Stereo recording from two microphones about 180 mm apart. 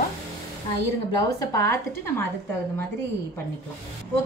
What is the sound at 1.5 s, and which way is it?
Speech, 15° left (ahead or behind).